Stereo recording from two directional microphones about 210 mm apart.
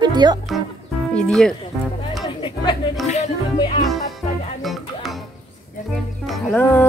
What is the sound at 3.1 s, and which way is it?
Music, 30° left (ahead or behind).